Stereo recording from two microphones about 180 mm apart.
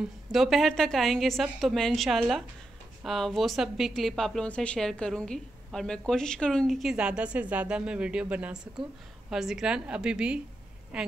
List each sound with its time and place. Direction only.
0.3 s a woman's voice: centre (ahead or behind)